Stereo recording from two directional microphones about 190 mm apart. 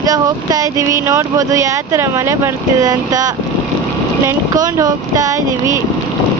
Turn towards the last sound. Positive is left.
turn(degrees=-15)  # may be behind; listen again after turning